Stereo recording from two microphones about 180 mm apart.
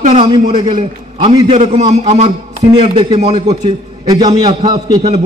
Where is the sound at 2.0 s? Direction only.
40° right (ahead or behind).